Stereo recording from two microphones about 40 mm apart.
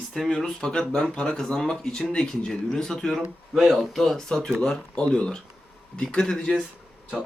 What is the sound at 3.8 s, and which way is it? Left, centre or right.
Speech, centre.